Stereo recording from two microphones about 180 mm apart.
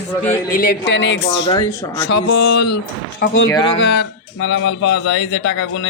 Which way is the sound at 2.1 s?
75° left (ahead or behind).